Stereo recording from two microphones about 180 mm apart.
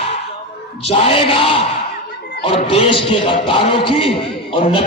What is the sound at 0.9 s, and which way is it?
A man's voice, 30° left (ahead or behind).